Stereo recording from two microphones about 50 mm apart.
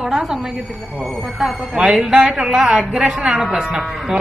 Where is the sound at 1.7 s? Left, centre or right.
Centre.